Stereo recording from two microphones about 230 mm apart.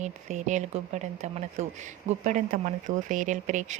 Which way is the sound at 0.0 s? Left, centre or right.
Right.